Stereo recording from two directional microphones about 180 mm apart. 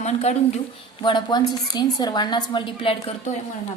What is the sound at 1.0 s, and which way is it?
A woman's voice, 25° left (ahead or behind).